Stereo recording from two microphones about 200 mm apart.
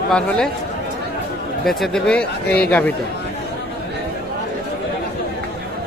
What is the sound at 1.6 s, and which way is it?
Speech, centre (ahead or behind).